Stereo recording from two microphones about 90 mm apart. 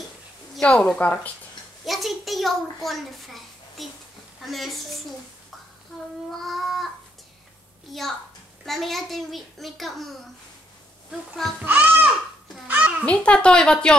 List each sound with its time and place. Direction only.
0.6 s speech: 10° left (ahead or behind)
1.9 s a child's voice: centre (ahead or behind)
7.9 s a child's voice: centre (ahead or behind)
11.6 s a child's voice: 20° right (ahead or behind)
12.6 s a sound: 15° right (ahead or behind)
13.0 s speech: 15° left (ahead or behind)